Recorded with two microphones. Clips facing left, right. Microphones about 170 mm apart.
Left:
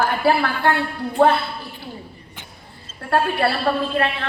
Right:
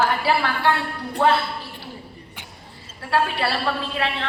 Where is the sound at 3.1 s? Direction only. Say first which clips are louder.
Left 3 dB; 55° left (ahead or behind).